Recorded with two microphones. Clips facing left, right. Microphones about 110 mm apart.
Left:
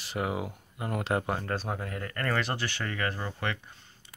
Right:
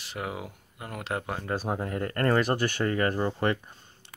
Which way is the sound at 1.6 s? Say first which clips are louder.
Right 5 dB; 25° right (ahead or behind).